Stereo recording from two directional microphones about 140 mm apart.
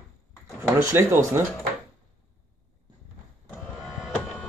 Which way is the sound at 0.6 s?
20° right (ahead or behind).